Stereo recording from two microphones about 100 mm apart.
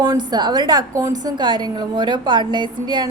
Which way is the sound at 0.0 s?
45° right (ahead or behind).